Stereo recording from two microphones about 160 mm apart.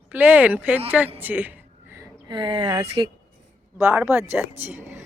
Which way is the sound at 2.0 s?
25° right (ahead or behind).